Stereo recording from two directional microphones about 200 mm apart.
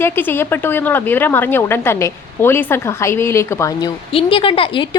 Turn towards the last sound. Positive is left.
turn(degrees=25)  # may be behind; listen again after turning